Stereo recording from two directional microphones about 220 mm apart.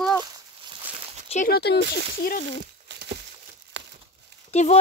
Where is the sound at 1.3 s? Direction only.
40° left (ahead or behind).